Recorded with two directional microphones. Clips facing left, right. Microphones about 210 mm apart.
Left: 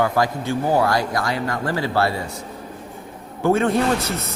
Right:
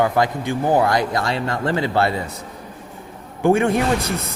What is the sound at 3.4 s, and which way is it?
Speech, 15° right (ahead or behind).